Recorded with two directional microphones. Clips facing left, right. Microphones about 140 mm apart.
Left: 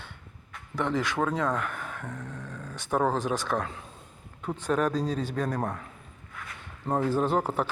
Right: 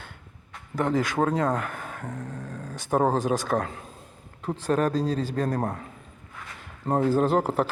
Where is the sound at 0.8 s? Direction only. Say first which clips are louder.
Right 4 dB; 45° right (ahead or behind).